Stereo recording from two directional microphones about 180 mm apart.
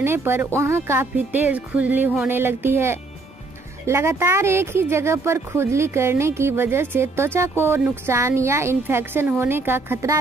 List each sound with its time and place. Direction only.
0.0 s speech: 15° right (ahead or behind)